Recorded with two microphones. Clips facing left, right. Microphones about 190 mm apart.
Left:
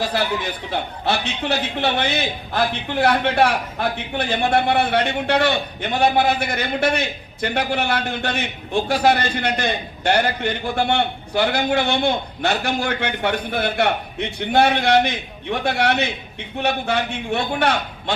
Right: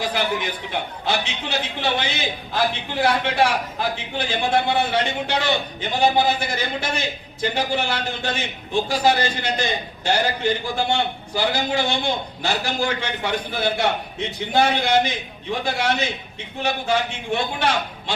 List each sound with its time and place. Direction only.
1.0 s a man's voice: 60° left (ahead or behind)